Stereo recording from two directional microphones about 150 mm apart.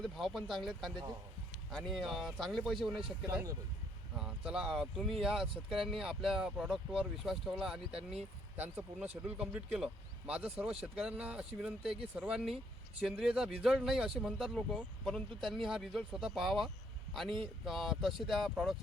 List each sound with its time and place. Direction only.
0.0 s speech: centre (ahead or behind)
3.2 s speech: 20° right (ahead or behind)
4.2 s speech: 5° right (ahead or behind)
17.7 s speech: centre (ahead or behind)